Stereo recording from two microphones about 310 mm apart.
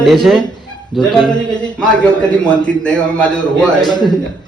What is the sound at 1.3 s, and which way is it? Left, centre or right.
Speech, centre.